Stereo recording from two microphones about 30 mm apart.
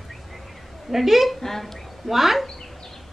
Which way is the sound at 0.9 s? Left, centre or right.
Centre.